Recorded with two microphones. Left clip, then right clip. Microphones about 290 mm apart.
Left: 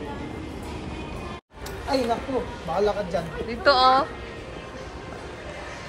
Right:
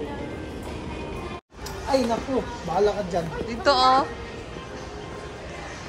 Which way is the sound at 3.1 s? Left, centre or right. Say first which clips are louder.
Right 1 dB; right.